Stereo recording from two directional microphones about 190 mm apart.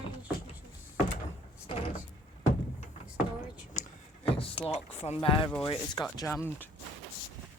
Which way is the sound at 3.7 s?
35° left (ahead or behind).